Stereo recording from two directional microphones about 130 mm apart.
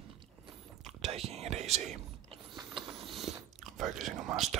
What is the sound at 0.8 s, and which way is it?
Whispering, 50° right (ahead or behind).